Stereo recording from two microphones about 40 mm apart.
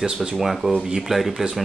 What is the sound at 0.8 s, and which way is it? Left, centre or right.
Speech, centre.